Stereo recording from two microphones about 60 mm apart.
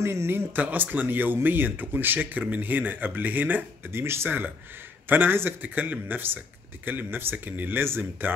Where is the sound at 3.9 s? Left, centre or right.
Right.